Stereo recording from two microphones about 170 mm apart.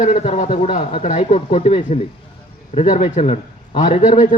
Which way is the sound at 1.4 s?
35° left (ahead or behind).